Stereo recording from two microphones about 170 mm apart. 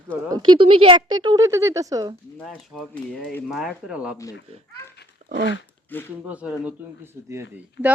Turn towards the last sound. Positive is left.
turn(degrees=-5)  # may be behind; listen again after turning